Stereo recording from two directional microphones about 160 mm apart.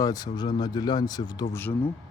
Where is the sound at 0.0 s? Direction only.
25° left (ahead or behind).